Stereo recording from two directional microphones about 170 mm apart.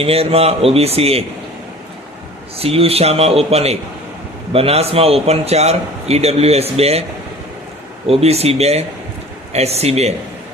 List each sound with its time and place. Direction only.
0.0 s a man's voice: 35° right (ahead or behind)
2.6 s a man's voice: 35° right (ahead or behind)
8.0 s a man's voice: 35° right (ahead or behind)